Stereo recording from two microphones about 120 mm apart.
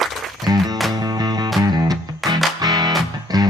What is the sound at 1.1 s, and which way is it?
Music, 35° right (ahead or behind).